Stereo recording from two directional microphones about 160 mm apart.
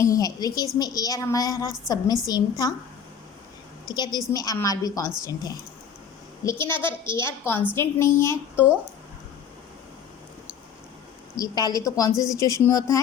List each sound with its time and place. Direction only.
0.0 s a woman's voice: 20° left (ahead or behind)
3.8 s a woman's voice: 25° left (ahead or behind)
6.7 s a woman's voice: 30° right (ahead or behind)
7.0 s a woman's voice: 15° left (ahead or behind)
11.3 s a woman's voice: 25° left (ahead or behind)